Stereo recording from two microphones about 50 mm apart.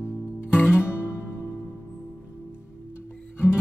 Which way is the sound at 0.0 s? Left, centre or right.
Right.